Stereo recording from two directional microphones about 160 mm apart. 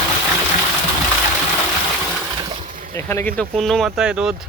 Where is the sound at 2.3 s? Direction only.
30° right (ahead or behind).